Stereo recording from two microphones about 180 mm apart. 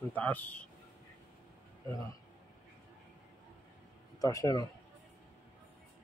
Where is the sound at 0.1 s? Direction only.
10° left (ahead or behind).